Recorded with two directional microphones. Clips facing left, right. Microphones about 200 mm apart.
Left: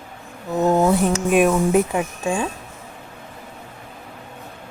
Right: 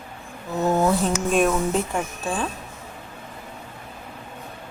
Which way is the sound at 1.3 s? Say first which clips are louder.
Left 5 dB; 10° left (ahead or behind).